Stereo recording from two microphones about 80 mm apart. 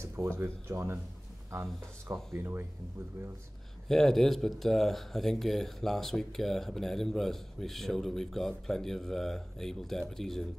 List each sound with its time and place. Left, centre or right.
0.0 s speech: right
2.3 s speech: right
3.9 s speech: centre